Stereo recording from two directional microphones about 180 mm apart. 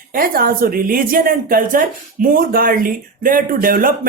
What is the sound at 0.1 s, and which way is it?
A woman's voice, 50° right (ahead or behind).